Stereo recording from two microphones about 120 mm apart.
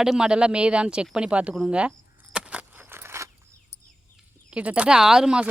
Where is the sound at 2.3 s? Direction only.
10° right (ahead or behind).